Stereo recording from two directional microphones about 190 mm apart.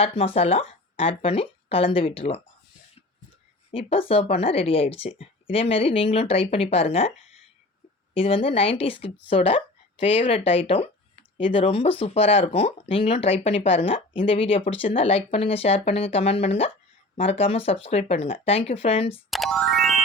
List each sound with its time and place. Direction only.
0.0 s speech: 30° left (ahead or behind)
3.7 s speech: 30° left (ahead or behind)
8.1 s speech: 30° left (ahead or behind)
19.3 s music: centre (ahead or behind)